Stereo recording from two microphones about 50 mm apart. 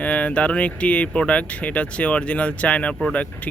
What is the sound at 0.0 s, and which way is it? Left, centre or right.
Speech, left.